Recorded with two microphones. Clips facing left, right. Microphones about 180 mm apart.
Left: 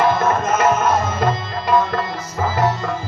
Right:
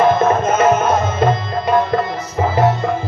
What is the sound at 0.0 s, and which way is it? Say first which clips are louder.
Music: right 4 dB; 20° right (ahead or behind).